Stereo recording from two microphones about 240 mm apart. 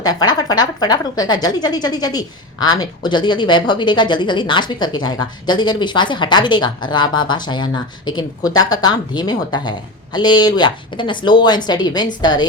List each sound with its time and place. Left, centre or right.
0.0 s a woman's voice: centre